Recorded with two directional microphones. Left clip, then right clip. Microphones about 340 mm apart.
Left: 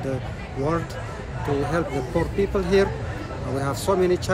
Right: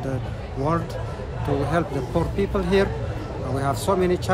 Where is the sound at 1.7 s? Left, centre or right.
Centre.